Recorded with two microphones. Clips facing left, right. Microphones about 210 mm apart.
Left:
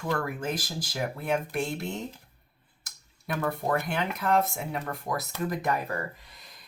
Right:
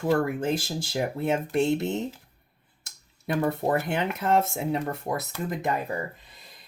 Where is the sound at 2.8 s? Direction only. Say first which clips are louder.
Right 5 dB; 25° right (ahead or behind).